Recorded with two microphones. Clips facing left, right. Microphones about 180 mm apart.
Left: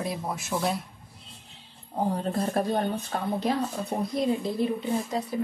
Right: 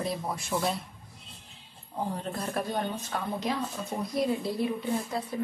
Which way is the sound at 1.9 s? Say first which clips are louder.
Left 5 dB; 45° left (ahead or behind).